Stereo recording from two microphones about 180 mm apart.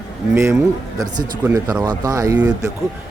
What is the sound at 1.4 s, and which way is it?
Speech, 10° right (ahead or behind).